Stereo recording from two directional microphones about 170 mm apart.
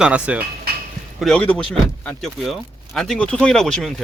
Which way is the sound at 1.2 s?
5° left (ahead or behind).